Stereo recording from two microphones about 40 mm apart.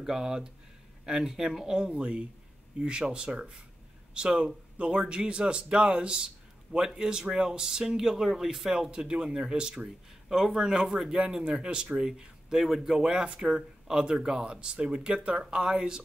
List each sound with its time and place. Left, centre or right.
0.0 s speech: centre
1.8 s speech: right
11.5 s speech: right